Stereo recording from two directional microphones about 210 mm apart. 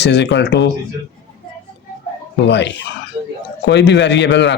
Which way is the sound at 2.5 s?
55° left (ahead or behind).